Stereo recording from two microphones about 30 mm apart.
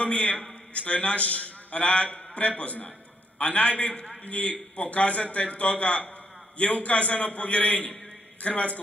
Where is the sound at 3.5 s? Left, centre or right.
Left.